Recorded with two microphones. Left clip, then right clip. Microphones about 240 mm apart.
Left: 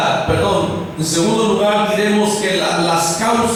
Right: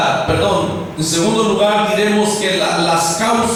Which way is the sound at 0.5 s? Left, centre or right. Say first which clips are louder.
Even; left.